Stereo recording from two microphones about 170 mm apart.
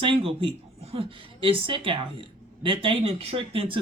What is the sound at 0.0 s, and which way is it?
Speech, 30° right (ahead or behind).